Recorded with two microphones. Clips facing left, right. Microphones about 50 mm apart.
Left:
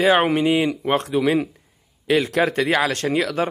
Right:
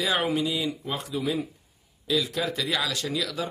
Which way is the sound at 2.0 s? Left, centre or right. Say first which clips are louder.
Left 8 dB; left.